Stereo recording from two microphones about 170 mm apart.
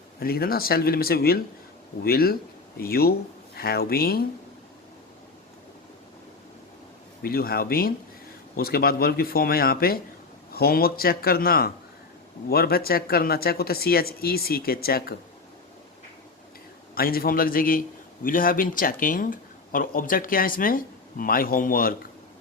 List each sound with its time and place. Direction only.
0.2 s a man's voice: 60° left (ahead or behind)
7.2 s a man's voice: 60° left (ahead or behind)
16.9 s a man's voice: 60° left (ahead or behind)